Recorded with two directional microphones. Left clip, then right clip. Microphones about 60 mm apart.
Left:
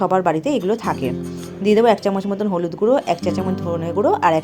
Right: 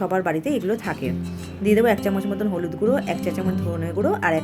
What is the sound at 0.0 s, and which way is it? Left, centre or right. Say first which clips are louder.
Speech: left 5 dB; centre.